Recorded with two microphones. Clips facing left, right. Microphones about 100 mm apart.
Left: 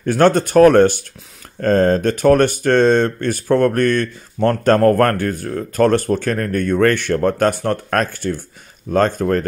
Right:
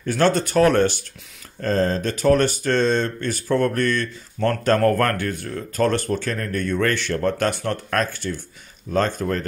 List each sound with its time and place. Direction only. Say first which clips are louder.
0.0 s speech: left 5 dB; 50° left (ahead or behind)